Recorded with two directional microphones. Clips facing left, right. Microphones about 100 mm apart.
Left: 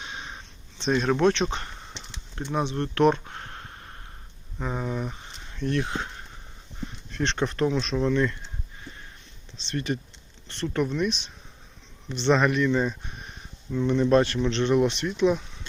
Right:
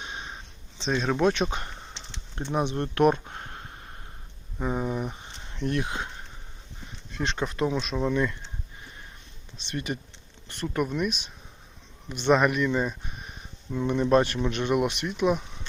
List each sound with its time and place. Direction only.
0.8 s speech: centre (ahead or behind); by 3.6 s 20° right (ahead or behind)
4.6 s speech: 10° right (ahead or behind)
7.1 s speech: 5° right (ahead or behind)
9.6 s speech: 15° right (ahead or behind)